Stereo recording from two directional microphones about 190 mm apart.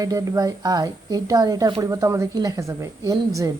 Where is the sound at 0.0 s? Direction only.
20° right (ahead or behind).